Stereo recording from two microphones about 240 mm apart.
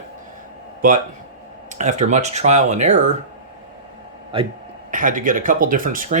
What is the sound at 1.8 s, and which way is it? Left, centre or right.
Speech, right.